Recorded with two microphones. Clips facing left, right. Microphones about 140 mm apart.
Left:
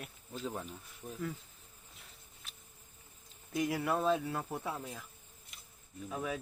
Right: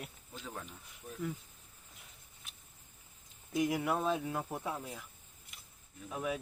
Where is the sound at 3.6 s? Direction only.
10° right (ahead or behind).